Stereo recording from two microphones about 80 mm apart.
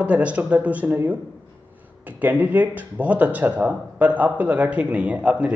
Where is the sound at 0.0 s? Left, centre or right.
Centre.